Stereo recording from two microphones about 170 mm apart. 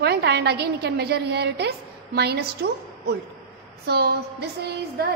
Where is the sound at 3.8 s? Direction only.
70° right (ahead or behind).